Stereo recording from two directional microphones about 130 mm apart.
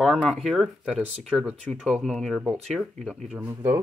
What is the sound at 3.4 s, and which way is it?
Speech, 20° right (ahead or behind).